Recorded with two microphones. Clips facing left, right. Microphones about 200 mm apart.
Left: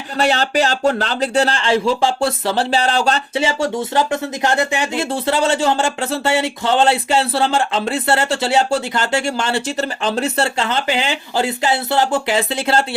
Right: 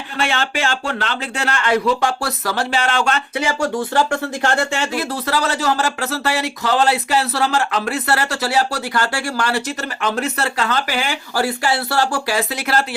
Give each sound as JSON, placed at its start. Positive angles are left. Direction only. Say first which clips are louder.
{"t": 0.2, "sound": "speech", "louder": "left 5 dB", "side_deg": 40}
{"t": 5.1, "sound": "speech", "louder": "left 4 dB", "side_deg": 25}